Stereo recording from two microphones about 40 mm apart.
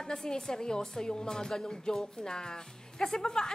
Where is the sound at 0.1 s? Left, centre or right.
Centre.